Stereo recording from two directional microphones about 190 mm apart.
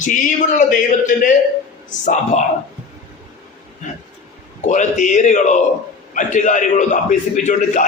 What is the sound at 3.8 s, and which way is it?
A man's voice, 40° left (ahead or behind).